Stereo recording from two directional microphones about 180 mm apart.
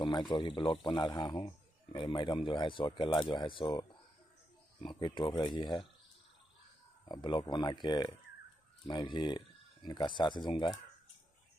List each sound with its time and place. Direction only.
0.0 s a man's voice: 25° left (ahead or behind)
7.1 s a man's voice: 25° left (ahead or behind)